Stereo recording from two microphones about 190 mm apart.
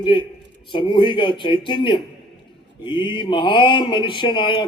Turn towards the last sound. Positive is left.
turn(degrees=25)  # may be behind; listen again after turning